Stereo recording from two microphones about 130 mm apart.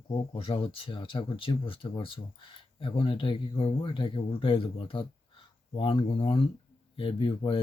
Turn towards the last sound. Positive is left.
turn(degrees=45)  # may be behind; listen again after turning